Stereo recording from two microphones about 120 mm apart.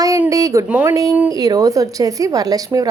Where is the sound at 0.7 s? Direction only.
10° right (ahead or behind).